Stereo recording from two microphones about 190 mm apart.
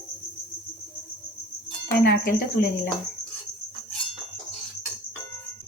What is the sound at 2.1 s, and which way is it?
Speech, 55° left (ahead or behind).